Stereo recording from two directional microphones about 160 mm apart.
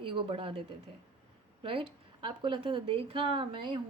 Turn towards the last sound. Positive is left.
turn(degrees=-35)  # may be behind; listen again after turning